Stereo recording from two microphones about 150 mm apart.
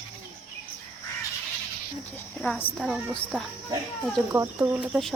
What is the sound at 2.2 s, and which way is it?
Speech, 10° left (ahead or behind).